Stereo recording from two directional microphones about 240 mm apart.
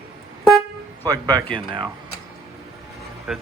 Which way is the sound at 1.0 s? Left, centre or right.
Centre.